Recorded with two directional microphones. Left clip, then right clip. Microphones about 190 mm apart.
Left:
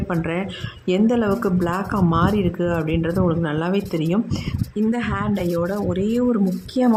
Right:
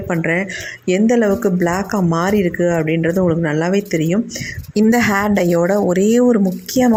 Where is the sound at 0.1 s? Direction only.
15° right (ahead or behind).